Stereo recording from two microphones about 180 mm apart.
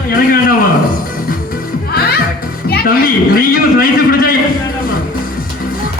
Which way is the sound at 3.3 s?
50° left (ahead or behind).